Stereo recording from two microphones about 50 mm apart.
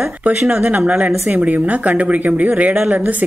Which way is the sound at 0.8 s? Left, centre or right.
Right.